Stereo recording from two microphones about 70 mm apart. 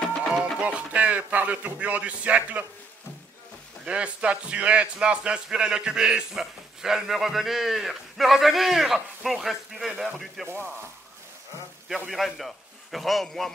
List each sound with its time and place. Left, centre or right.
0.0 s music: centre
0.3 s music: centre
0.6 s speech: centre
3.8 s a man's voice: centre
10.4 s speech: right
12.1 s a man's voice: centre